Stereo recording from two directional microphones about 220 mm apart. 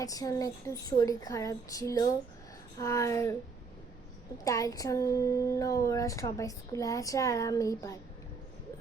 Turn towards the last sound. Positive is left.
turn(degrees=15)  # may be behind; listen again after turning